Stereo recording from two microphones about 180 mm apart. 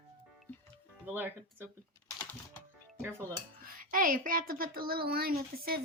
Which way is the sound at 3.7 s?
50° right (ahead or behind).